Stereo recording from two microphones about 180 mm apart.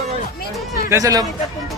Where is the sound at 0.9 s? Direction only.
20° right (ahead or behind).